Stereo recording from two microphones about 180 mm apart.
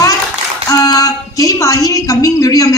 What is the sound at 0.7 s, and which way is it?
A woman's voice, 20° left (ahead or behind).